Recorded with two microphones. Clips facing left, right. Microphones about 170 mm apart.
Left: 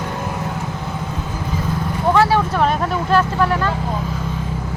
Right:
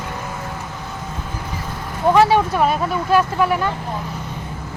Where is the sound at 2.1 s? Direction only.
15° right (ahead or behind).